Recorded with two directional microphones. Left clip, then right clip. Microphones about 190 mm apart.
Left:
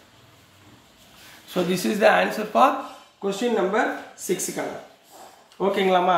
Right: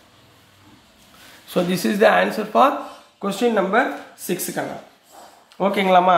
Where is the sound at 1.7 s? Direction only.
25° right (ahead or behind).